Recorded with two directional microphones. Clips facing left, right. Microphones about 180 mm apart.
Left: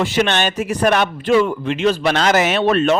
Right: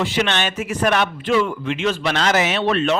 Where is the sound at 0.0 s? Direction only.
45° left (ahead or behind).